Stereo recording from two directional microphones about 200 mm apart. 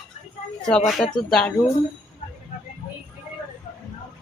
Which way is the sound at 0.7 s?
5° left (ahead or behind).